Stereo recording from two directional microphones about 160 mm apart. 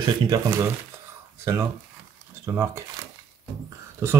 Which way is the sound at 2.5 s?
20° right (ahead or behind).